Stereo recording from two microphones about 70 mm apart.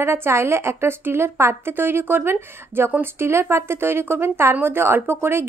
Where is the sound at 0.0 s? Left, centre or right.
Right.